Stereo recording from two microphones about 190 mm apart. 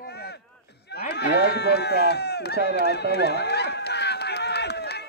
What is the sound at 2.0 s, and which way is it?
Horse, 60° left (ahead or behind).